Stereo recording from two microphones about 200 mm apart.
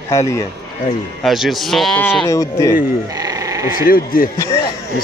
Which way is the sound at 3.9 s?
45° left (ahead or behind).